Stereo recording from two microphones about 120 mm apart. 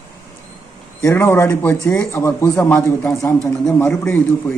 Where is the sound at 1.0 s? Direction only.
25° left (ahead or behind).